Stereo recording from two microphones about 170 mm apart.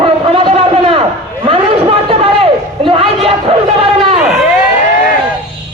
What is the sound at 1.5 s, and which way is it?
Chatter, 35° right (ahead or behind).